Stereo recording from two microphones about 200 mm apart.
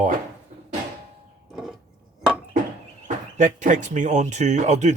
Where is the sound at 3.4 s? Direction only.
40° right (ahead or behind).